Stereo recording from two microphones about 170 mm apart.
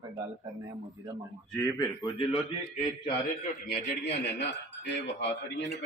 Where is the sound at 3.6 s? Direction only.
75° left (ahead or behind); by 5.3 s 90° left.